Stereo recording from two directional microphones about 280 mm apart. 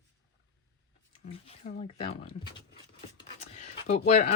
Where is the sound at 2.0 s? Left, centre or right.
Centre.